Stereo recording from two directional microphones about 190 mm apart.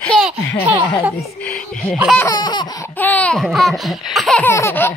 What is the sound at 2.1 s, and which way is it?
Laughter, 20° left (ahead or behind).